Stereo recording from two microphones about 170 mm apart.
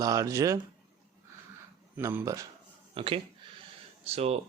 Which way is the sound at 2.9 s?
30° right (ahead or behind).